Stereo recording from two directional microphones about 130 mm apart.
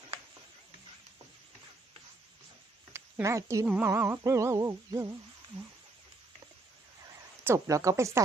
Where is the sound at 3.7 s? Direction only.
15° right (ahead or behind).